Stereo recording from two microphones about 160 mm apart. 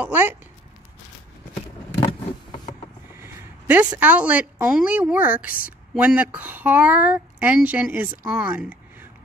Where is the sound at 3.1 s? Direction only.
15° right (ahead or behind).